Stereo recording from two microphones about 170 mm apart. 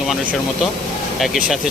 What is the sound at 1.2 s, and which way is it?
Speech, centre (ahead or behind).